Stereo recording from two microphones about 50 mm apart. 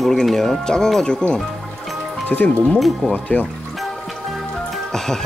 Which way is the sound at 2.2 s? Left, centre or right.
Left.